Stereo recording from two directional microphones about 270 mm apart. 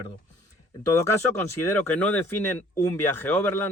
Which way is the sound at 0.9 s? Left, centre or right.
Centre.